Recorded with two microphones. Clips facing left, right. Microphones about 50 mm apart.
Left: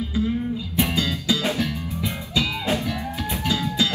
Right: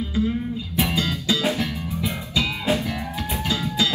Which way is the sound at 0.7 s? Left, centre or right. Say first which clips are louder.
Even; right.